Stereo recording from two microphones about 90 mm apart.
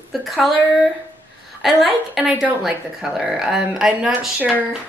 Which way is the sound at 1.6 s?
5° right (ahead or behind).